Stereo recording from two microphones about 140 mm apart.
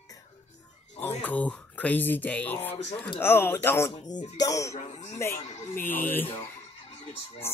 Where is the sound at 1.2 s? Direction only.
10° left (ahead or behind).